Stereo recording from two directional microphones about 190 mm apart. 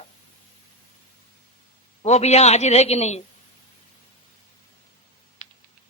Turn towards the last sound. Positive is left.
turn(degrees=35)  # may be behind; listen again after turning